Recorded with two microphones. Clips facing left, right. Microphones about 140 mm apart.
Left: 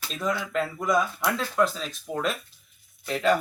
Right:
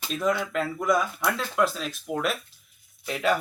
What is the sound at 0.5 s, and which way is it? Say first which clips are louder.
Speech: even; centre (ahead or behind).